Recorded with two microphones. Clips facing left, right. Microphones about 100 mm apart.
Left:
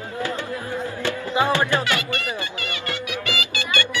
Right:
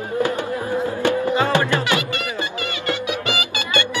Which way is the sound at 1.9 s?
20° right (ahead or behind).